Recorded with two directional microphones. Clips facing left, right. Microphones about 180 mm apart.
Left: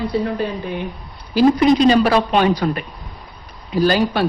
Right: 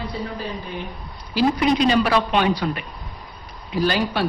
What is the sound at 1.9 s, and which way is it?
Speech, 40° left (ahead or behind).